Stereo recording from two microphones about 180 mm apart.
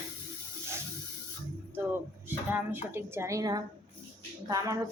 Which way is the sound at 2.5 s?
10° right (ahead or behind).